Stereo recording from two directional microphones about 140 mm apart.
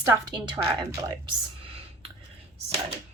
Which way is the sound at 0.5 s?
30° right (ahead or behind).